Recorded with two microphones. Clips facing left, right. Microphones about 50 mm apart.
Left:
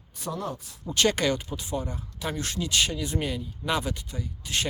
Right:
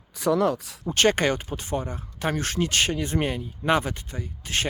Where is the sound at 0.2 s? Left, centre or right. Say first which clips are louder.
Right 11 dB; right.